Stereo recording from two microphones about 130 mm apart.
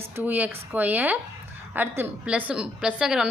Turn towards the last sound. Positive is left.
turn(degrees=-5)  # may be behind; listen again after turning